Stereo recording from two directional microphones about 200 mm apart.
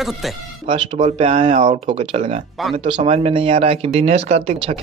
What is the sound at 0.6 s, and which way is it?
Speech, 25° right (ahead or behind).